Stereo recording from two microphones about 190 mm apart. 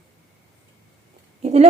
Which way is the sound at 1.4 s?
35° right (ahead or behind).